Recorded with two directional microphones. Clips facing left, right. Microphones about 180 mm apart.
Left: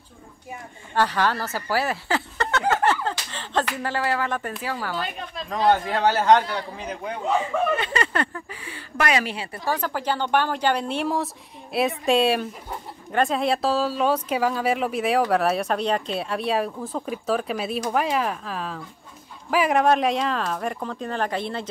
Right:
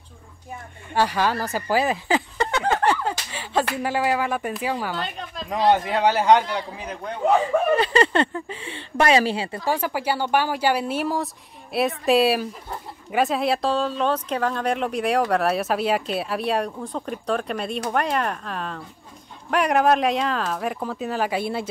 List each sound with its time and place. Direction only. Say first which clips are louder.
0.9 s speech: right 1 dB; 15° right (ahead or behind)
2.7 s a sound: even; 15° right (ahead or behind)
3.7 s speech: right 3 dB; 10° right (ahead or behind); by 7.2 s 5° left (ahead or behind)
7.7 s speech: right 6 dB; 35° right (ahead or behind)
9.7 s speech: right 1 dB; 10° right (ahead or behind)